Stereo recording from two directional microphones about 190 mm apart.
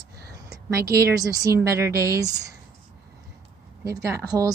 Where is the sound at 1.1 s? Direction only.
15° right (ahead or behind).